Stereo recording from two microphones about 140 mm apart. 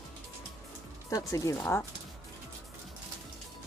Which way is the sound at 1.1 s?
20° left (ahead or behind).